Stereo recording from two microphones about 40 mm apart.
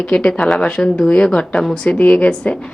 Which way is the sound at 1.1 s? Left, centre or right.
Left.